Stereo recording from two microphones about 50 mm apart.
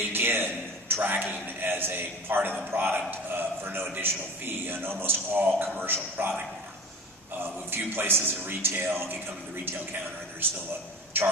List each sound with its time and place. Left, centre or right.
0.1 s a man's voice: right
7.4 s a man's voice: right
11.1 s a man's voice: right